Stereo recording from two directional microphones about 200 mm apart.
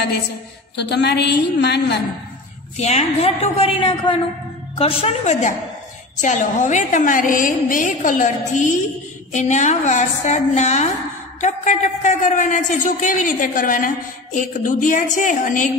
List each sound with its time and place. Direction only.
0.7 s a woman's voice: 55° left (ahead or behind)
2.8 s a woman's voice: 35° left (ahead or behind)